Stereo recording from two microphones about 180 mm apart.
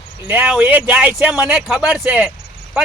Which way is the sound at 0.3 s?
10° right (ahead or behind).